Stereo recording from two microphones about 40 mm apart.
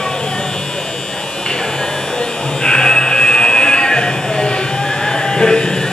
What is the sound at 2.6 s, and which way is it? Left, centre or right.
Buzzer, centre.